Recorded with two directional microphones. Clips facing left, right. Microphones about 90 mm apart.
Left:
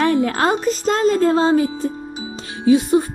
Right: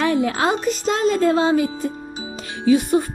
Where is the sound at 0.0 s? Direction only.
45° left (ahead or behind).